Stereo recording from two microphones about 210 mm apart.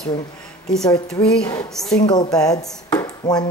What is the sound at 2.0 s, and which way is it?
Speech, 20° left (ahead or behind).